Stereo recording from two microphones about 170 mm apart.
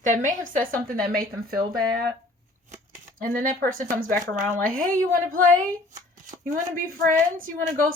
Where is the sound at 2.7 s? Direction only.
50° right (ahead or behind).